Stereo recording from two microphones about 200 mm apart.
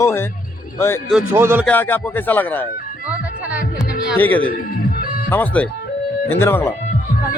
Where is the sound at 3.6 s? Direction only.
45° left (ahead or behind).